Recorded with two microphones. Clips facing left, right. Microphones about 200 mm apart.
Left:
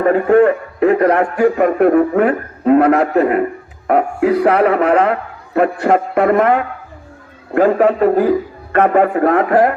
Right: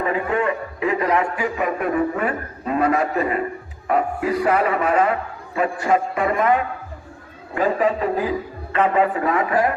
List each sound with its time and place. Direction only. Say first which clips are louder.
0.0 s a man's voice: left 11 dB; 55° left (ahead or behind)